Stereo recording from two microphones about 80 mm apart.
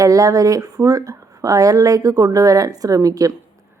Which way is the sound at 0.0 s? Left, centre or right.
Right.